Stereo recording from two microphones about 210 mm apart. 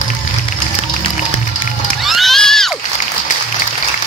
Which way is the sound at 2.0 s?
Centre (ahead or behind).